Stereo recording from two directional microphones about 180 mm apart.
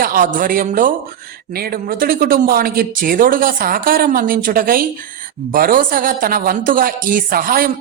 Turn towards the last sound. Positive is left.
turn(degrees=-55)  # may be behind; listen again after turning